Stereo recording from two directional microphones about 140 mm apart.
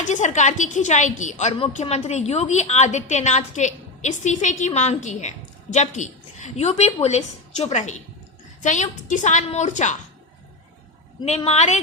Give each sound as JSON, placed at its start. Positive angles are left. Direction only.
{"t": 0.0, "sound": "a woman's voice", "side_deg": 60}
{"t": 1.5, "sound": "a woman's voice", "side_deg": 50}
{"t": 11.4, "sound": "speech", "side_deg": 50}